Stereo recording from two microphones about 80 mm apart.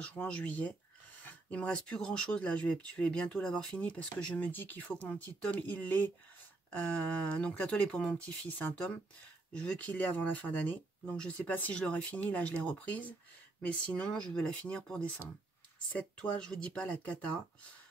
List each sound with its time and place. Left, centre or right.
0.0 s speech: centre
16.2 s speech: centre